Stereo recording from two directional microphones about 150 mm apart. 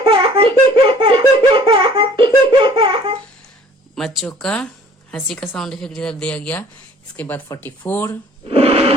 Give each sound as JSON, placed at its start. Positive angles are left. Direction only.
{"t": 0.0, "sound": "baby laughter", "side_deg": -35}
{"t": 3.9, "sound": "a woman's voice", "side_deg": 0}
{"t": 8.4, "sound": "a sound", "side_deg": -40}